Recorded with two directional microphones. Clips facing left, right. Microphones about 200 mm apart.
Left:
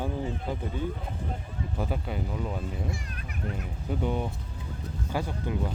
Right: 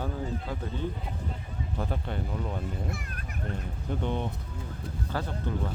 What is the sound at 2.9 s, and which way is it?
Speech, 55° right (ahead or behind).